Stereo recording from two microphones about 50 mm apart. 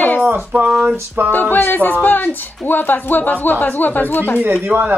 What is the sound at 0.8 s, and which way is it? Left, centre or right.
Speech, right.